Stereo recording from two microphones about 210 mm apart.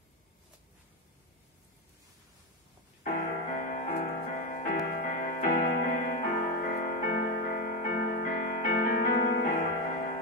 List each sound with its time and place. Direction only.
3.0 s music: 40° left (ahead or behind)